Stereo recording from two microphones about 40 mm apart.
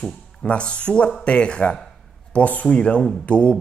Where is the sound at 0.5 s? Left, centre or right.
Left.